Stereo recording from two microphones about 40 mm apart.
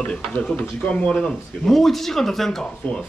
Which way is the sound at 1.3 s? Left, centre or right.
Centre.